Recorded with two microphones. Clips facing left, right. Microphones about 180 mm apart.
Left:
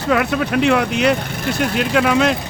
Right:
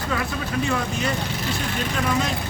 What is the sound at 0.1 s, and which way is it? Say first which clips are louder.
Speech: left 11 dB; 70° left (ahead or behind).